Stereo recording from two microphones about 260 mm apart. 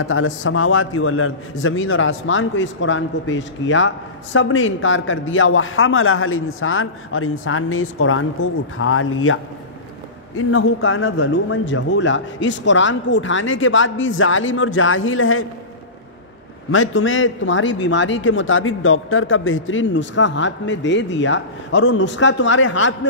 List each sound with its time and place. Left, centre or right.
0.0 s a man's voice: left
16.7 s a man's voice: left